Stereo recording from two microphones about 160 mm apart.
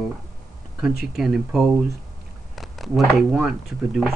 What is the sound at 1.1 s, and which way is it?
Speech, 5° right (ahead or behind).